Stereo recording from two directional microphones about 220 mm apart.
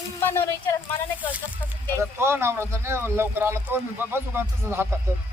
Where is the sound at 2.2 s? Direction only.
10° right (ahead or behind).